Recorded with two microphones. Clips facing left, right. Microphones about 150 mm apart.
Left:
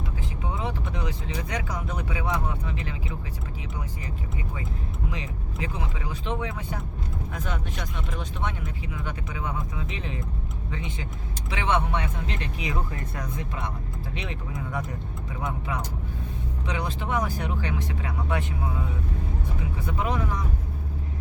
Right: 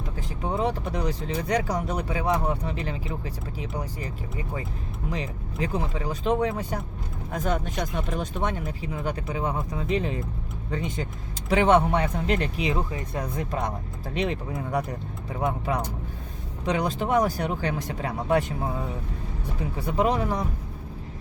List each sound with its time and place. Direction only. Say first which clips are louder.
0.2 s speech: right 7 dB; 40° right (ahead or behind)
5.1 s speech: right 4 dB; 35° right (ahead or behind)
12.7 s speech: right 4 dB; 20° right (ahead or behind)
13.2 s speech: right 6 dB; 40° right (ahead or behind)
19.8 s speech: right 5 dB; 35° right (ahead or behind)